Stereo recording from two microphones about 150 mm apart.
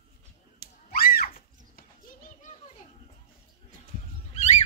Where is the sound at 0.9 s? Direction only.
75° left (ahead or behind).